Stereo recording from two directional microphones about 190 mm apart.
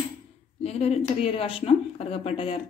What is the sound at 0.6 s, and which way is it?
Speech, 35° left (ahead or behind).